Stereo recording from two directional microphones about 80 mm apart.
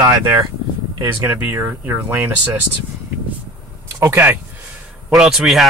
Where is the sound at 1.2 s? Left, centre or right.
Right.